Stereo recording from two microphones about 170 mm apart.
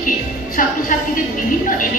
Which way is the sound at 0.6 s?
55° left (ahead or behind).